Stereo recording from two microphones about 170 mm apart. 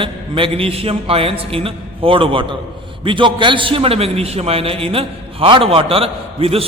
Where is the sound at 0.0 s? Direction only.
30° right (ahead or behind).